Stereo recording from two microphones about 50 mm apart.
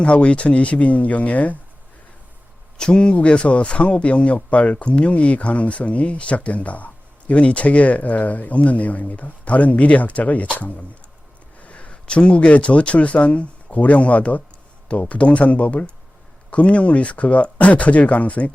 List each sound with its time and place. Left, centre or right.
0.0 s speech: left
2.7 s speech: centre